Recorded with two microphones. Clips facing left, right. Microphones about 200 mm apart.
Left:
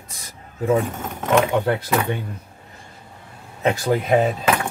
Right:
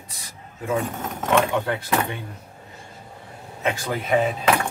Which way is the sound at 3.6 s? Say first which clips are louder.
Left 6 dB; 35° left (ahead or behind).